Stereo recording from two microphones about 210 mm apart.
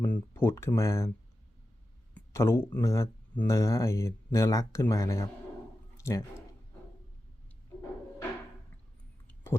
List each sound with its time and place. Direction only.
0.0 s speech: 10° left (ahead or behind)
2.1 s speech: 10° left (ahead or behind)
9.2 s a sound: 10° left (ahead or behind)